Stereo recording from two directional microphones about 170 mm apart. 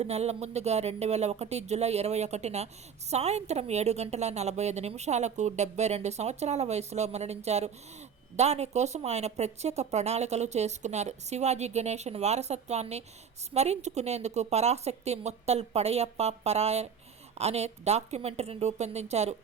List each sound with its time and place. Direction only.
0.0 s speech: 40° right (ahead or behind)